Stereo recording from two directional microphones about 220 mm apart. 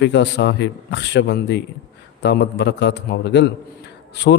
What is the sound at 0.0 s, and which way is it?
A man's voice, 50° left (ahead or behind).